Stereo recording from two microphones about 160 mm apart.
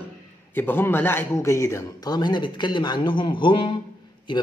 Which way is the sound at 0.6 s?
15° left (ahead or behind).